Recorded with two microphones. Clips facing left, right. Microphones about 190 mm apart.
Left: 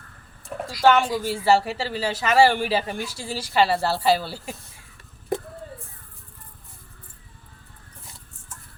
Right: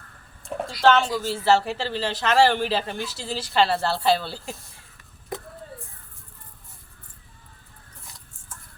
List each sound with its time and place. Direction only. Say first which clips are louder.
0.8 s speech: left 1 dB; 10° left (ahead or behind)